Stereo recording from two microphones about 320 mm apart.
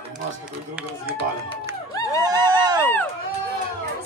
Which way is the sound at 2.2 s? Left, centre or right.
Centre.